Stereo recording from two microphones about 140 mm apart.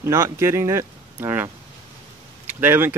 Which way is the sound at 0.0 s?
20° right (ahead or behind).